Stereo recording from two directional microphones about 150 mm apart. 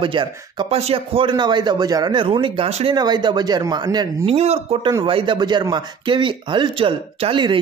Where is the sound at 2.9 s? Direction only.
30° right (ahead or behind).